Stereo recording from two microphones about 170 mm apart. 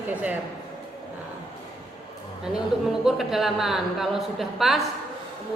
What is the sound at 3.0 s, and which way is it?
A woman's voice, centre (ahead or behind).